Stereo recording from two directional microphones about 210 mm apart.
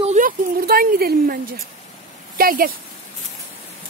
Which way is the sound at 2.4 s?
45° right (ahead or behind).